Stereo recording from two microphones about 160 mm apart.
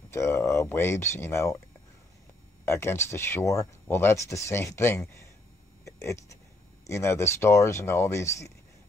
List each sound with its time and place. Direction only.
0.1 s speech: 15° left (ahead or behind)
2.6 s speech: 15° left (ahead or behind)